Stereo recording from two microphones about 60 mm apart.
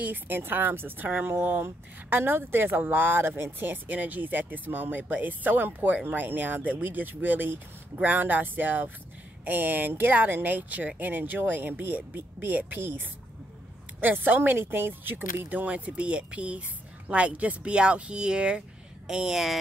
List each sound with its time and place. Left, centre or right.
0.0 s speech: right
14.0 s speech: right
15.6 s speech: right; by 19.6 s centre